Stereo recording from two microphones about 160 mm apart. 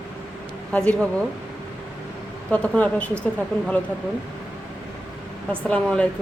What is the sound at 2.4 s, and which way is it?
Speech, 5° left (ahead or behind).